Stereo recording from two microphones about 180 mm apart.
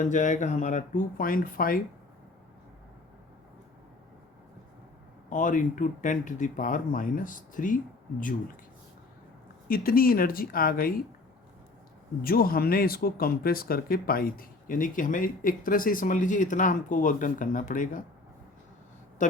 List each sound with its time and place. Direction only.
0.0 s speech: 45° left (ahead or behind)
5.3 s speech: 45° left (ahead or behind)
9.6 s speech: 55° left (ahead or behind)
12.2 s speech: 55° left (ahead or behind)
19.2 s speech: 45° left (ahead or behind)